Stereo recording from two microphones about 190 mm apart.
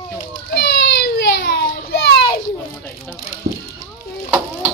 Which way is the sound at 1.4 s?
55° left (ahead or behind).